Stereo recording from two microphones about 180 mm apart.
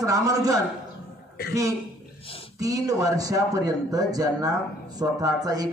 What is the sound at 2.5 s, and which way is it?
Speech, 20° right (ahead or behind).